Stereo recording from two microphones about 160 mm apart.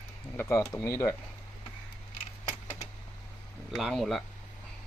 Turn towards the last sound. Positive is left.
turn(degrees=0)  # may be behind; listen again after turning